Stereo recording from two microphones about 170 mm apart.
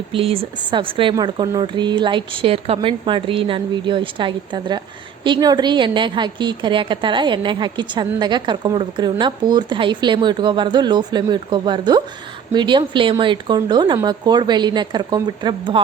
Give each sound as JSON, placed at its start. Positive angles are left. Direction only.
{"t": 0.1, "sound": "a woman's voice", "side_deg": -35}